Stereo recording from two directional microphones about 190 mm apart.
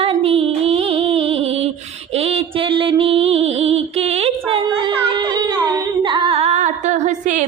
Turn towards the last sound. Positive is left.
turn(degrees=-40)  # may be behind; listen again after turning